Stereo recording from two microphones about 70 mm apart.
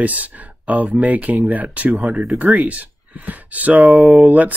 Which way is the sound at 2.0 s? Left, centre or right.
Centre.